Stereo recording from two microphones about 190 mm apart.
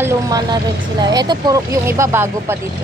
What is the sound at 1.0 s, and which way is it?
Speech, 20° right (ahead or behind).